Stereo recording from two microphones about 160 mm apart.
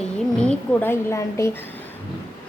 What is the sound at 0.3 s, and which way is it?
A woman's voice, 10° left (ahead or behind).